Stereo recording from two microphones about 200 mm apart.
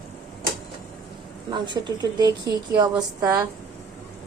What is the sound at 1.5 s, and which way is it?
Speech, 20° right (ahead or behind).